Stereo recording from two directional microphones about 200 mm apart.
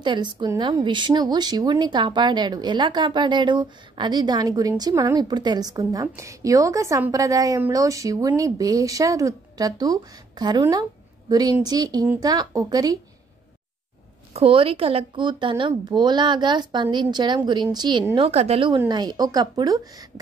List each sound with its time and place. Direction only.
0.0 s speech: 25° right (ahead or behind)
14.3 s speech: 30° right (ahead or behind)
18.1 s a woman's voice: 30° right (ahead or behind)